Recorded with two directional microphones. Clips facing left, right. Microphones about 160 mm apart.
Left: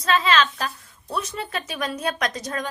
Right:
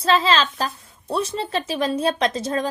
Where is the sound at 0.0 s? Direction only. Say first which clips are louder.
Right 2 dB; 30° right (ahead or behind).